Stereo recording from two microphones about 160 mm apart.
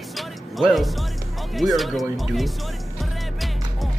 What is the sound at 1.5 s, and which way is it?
Speech, centre (ahead or behind).